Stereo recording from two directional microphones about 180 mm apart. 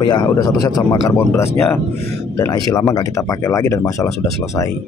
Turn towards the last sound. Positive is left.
turn(degrees=20)  # may be behind; listen again after turning